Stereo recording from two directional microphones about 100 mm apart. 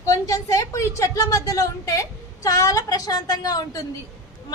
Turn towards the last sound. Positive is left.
turn(degrees=40)  # may be behind; listen again after turning